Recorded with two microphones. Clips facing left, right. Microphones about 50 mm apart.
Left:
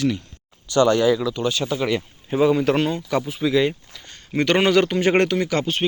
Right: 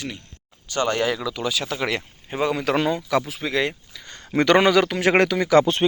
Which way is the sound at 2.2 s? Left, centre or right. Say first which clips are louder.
Left 5 dB; right.